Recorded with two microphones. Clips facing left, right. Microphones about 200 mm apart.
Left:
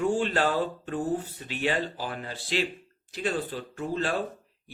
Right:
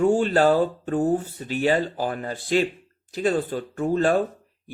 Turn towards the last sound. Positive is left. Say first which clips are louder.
# right 8 dB
turn(degrees=-50)  # may be behind; listen again after turning